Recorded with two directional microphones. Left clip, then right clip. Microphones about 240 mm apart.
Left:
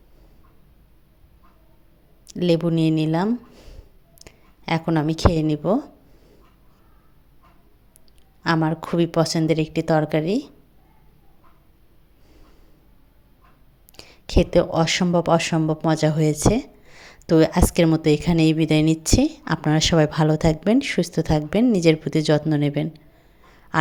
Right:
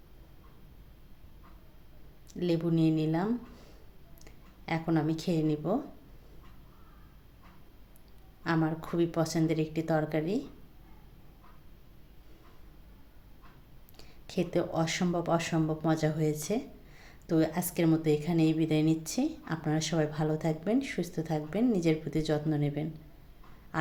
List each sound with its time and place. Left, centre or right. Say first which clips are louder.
2.2 s a woman's voice: left 11 dB; left
8.4 s speech: left 9 dB; left
13.9 s speech: left 14 dB; left